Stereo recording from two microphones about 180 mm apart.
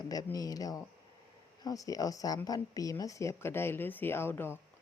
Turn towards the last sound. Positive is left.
turn(degrees=10)  # may be behind; listen again after turning